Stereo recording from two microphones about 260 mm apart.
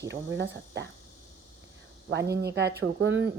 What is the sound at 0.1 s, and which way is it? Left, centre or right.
Speech, right.